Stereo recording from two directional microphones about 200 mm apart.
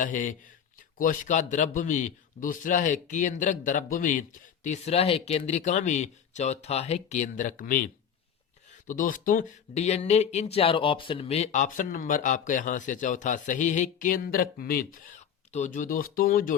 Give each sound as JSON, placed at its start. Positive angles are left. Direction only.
{"t": 0.0, "sound": "speech", "side_deg": 40}
{"t": 8.9, "sound": "speech", "side_deg": 40}